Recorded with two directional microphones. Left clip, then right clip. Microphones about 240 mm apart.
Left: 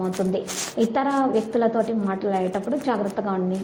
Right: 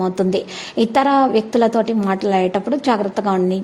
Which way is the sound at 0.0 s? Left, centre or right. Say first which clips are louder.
Right 6 dB; right.